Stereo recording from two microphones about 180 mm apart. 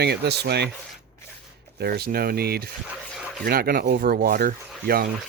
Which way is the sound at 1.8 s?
60° right (ahead or behind).